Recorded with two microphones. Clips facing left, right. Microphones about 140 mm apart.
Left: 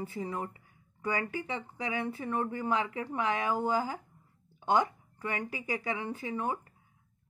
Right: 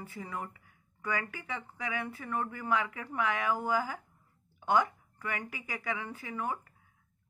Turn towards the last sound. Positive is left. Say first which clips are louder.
# left 3 dB
turn(degrees=25)  # may be behind; listen again after turning